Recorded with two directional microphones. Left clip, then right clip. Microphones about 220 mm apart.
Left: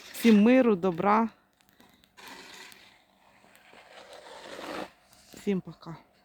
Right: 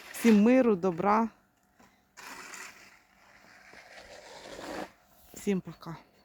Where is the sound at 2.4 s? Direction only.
20° right (ahead or behind).